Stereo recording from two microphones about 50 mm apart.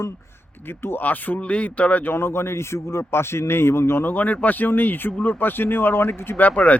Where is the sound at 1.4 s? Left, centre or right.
Left.